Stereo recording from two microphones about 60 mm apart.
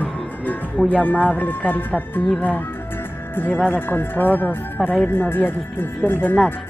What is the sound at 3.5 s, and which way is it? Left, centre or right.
Speech, left.